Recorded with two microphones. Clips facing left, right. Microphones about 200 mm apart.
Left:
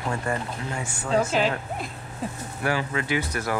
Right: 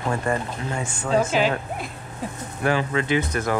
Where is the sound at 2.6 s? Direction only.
20° right (ahead or behind).